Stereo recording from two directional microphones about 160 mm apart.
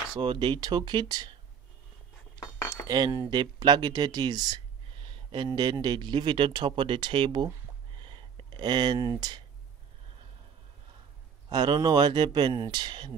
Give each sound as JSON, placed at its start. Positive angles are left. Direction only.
{"t": 0.2, "sound": "speech", "side_deg": -30}
{"t": 2.9, "sound": "speech", "side_deg": -25}
{"t": 8.0, "sound": "a sound", "side_deg": -30}
{"t": 11.4, "sound": "speech", "side_deg": -25}